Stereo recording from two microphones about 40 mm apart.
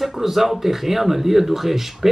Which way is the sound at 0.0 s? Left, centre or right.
Centre.